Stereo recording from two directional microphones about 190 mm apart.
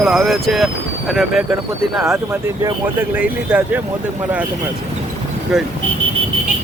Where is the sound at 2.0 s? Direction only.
15° right (ahead or behind).